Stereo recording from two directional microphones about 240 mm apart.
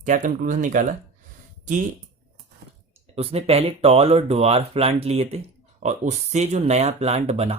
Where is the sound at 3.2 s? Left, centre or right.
Right.